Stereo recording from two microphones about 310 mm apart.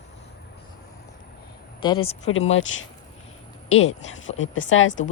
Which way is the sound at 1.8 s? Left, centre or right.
Centre.